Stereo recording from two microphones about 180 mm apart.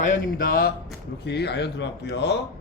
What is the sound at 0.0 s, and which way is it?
Speech, 50° left (ahead or behind).